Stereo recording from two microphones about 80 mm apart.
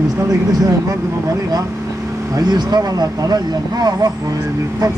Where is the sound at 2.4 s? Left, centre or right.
Right.